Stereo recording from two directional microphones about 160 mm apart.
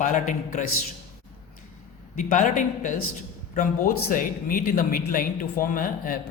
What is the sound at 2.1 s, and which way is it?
Speech, 50° left (ahead or behind).